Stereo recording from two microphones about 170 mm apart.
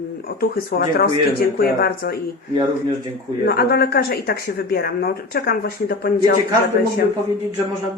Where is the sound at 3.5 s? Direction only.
70° left (ahead or behind).